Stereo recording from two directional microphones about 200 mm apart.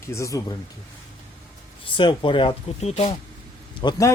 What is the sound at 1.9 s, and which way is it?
Speech, 25° left (ahead or behind).